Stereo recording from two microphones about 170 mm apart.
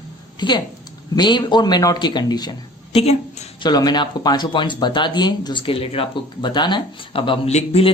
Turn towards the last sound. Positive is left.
turn(degrees=40)  # may be behind; listen again after turning